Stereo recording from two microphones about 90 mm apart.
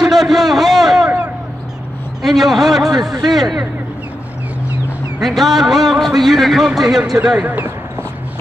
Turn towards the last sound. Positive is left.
turn(degrees=-20)  # may be behind; listen again after turning